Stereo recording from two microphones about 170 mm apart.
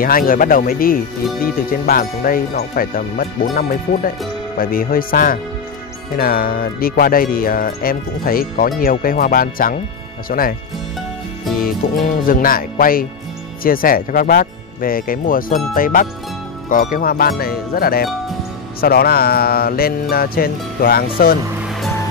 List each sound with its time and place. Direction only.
0.0 s speech: 55° left (ahead or behind)
11.6 s speech: 55° left (ahead or behind)